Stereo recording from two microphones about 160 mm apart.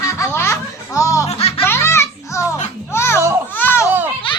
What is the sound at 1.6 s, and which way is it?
Music, 15° left (ahead or behind).